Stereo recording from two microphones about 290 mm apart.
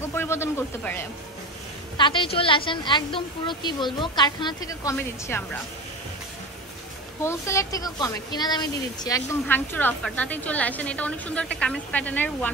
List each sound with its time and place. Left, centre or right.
0.0 s a man's voice: centre
7.2 s a woman's voice: centre